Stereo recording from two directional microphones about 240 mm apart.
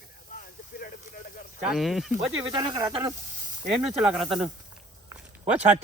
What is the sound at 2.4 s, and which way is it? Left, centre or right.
Speech, centre.